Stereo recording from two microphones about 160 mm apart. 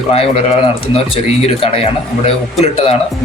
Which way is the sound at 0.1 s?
40° left (ahead or behind).